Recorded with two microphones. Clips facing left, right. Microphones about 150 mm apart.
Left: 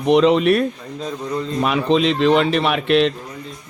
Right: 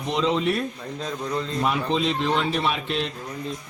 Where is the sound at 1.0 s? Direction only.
5° left (ahead or behind).